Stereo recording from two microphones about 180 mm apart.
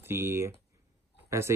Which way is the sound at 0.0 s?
15° right (ahead or behind).